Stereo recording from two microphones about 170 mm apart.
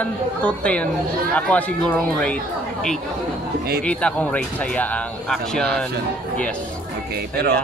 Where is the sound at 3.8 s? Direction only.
5° left (ahead or behind).